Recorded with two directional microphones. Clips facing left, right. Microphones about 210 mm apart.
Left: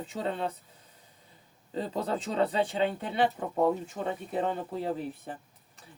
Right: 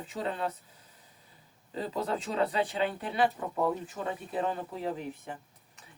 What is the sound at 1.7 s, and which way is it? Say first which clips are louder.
Speech: left 1 dB; 30° left (ahead or behind).